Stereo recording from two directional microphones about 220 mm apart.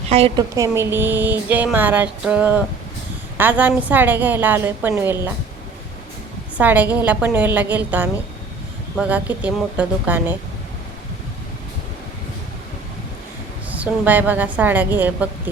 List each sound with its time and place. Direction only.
0.1 s a woman's voice: 25° right (ahead or behind)
0.5 s speech: 15° right (ahead or behind)
6.6 s speech: 5° right (ahead or behind)
13.7 s speech: 5° right (ahead or behind)